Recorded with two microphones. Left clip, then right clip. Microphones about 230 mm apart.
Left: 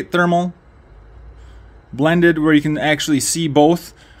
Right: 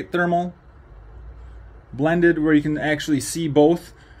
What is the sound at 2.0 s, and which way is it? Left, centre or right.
Speech, left.